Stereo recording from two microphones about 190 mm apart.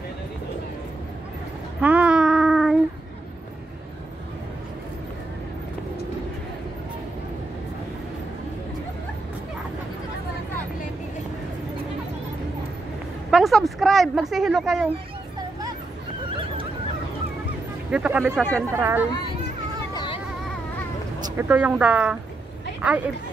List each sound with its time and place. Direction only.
1.8 s child singing: 5° right (ahead or behind)
13.3 s a woman's voice: centre (ahead or behind)
17.9 s a woman's voice: 5° right (ahead or behind)
19.9 s a sound: 20° left (ahead or behind)
21.4 s speech: 10° right (ahead or behind)